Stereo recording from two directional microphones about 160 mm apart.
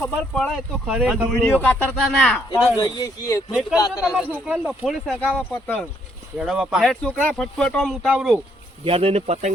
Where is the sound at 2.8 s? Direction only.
25° left (ahead or behind).